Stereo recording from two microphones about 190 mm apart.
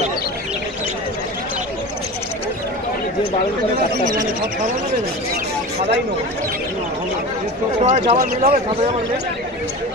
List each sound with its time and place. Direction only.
7.8 s speech: 35° right (ahead or behind)